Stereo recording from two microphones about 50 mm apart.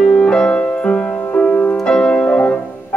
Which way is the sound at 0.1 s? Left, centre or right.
Centre.